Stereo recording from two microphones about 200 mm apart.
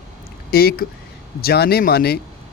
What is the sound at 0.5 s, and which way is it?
Speech, 50° left (ahead or behind).